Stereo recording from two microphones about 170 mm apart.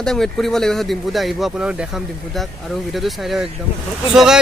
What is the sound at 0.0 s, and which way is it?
Speech, 5° left (ahead or behind).